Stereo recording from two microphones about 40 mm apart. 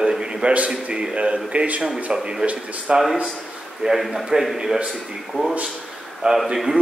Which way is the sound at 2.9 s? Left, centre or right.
Right.